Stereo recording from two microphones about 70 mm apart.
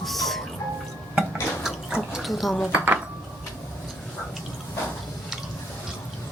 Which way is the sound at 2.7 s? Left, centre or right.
Right.